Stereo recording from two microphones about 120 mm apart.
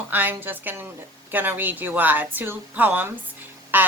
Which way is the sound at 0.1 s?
15° right (ahead or behind).